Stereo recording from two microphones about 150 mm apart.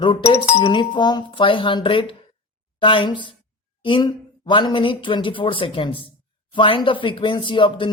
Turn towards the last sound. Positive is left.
turn(degrees=35)  # may be behind; listen again after turning